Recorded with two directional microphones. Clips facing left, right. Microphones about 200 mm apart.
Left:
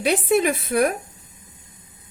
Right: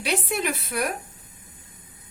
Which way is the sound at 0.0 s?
50° left (ahead or behind).